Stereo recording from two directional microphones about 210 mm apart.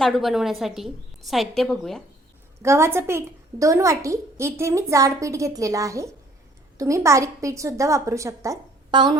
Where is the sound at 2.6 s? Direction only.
15° right (ahead or behind).